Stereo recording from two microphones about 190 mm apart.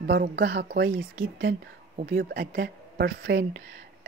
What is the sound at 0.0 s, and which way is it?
Speech, 60° right (ahead or behind).